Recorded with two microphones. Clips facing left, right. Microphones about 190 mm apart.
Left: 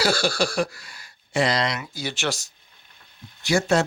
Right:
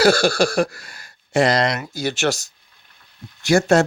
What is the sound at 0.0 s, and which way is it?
Speech, 50° right (ahead or behind).